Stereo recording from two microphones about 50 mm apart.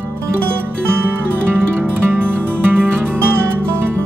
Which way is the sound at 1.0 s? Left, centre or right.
Right.